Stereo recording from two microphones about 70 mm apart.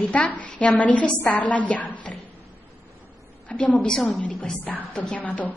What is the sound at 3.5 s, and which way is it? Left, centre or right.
A woman's voice, centre.